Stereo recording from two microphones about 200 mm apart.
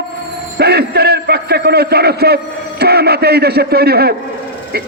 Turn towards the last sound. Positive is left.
turn(degrees=-50)  # may be behind; listen again after turning